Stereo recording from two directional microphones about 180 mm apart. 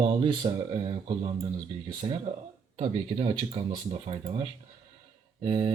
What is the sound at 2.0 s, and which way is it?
Speech, 25° right (ahead or behind).